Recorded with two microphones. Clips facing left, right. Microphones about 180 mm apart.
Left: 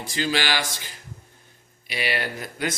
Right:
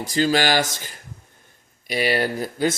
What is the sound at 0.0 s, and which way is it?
A man's voice, 40° right (ahead or behind).